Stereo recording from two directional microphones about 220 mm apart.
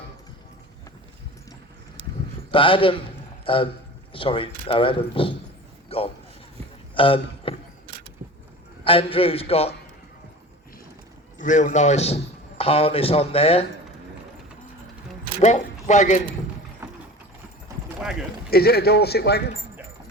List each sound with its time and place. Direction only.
2.5 s a man's voice: 25° left (ahead or behind)
5.9 s a sound: 25° left (ahead or behind)
8.2 s a sound: 40° right (ahead or behind)
8.8 s a man's voice: 25° left (ahead or behind)
11.3 s a man's voice: 35° left (ahead or behind)
15.4 s speech: 30° left (ahead or behind)
17.7 s clip-clop: 15° right (ahead or behind)
18.0 s a sound: 5° right (ahead or behind)
18.5 s a man's voice: 45° left (ahead or behind)